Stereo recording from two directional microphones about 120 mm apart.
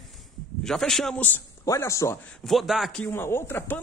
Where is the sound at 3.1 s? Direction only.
20° left (ahead or behind).